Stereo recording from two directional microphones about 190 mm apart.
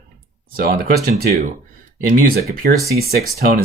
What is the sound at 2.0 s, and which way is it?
Speech, 45° right (ahead or behind).